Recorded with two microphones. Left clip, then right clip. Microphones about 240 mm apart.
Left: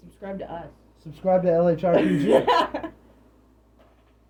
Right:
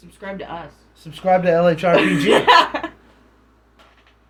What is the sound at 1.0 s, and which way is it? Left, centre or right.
Speech, centre.